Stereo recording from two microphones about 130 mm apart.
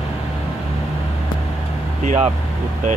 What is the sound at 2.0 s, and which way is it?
Speech, 70° right (ahead or behind).